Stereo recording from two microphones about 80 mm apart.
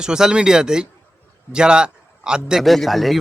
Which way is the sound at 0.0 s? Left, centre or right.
Centre.